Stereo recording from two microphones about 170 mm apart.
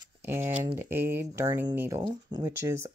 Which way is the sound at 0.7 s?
15° right (ahead or behind).